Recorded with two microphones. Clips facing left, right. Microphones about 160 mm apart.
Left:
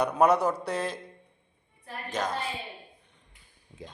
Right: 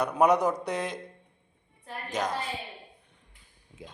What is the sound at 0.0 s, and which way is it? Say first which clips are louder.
Speech: even; 15° right (ahead or behind).